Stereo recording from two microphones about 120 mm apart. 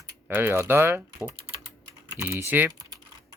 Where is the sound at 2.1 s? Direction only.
25° right (ahead or behind).